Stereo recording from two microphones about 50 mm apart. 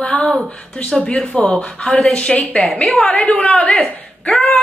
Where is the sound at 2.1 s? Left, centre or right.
Left.